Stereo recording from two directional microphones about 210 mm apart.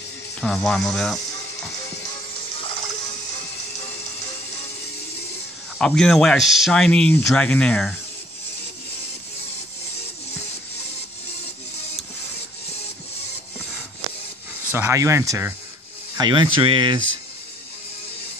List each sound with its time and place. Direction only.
0.4 s speech: centre (ahead or behind)
5.8 s speech: 5° left (ahead or behind)
14.7 s speech: 10° right (ahead or behind)